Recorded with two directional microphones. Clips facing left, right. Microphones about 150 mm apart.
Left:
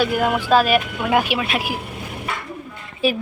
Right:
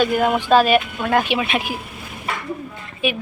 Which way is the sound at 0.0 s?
5° left (ahead or behind).